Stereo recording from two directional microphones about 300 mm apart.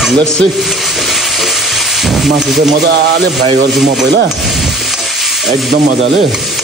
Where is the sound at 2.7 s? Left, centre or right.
Right.